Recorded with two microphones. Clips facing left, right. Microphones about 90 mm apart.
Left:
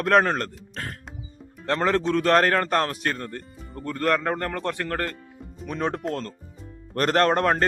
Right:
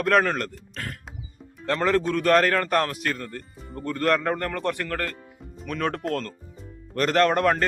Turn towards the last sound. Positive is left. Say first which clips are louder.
# even
turn(degrees=30)  # may be behind; listen again after turning